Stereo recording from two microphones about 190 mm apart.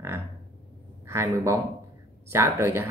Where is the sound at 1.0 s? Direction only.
15° right (ahead or behind).